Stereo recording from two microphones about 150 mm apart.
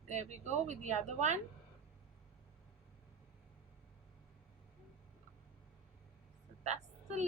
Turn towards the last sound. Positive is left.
turn(degrees=-50)  # may be behind; listen again after turning